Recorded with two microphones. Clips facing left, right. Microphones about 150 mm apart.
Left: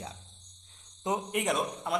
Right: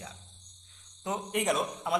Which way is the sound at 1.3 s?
Centre (ahead or behind).